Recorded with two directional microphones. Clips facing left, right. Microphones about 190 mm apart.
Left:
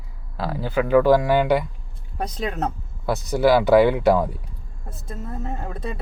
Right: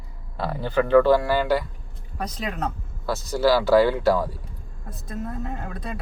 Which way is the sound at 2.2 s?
30° left (ahead or behind).